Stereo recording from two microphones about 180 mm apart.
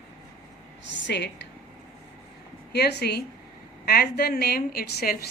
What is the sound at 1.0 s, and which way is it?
Speech, 75° left (ahead or behind).